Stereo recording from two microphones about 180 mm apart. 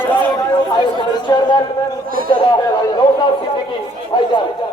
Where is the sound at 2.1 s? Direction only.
55° right (ahead or behind).